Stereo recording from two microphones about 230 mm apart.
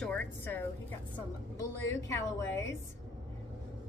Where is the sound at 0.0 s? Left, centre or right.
Centre.